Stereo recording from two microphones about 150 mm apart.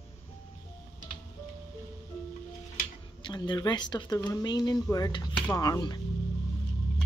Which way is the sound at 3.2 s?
30° left (ahead or behind).